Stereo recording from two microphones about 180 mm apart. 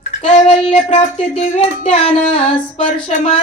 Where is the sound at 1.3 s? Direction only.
35° left (ahead or behind).